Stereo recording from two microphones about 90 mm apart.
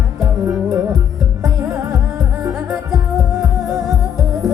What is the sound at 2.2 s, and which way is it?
Music, 40° right (ahead or behind).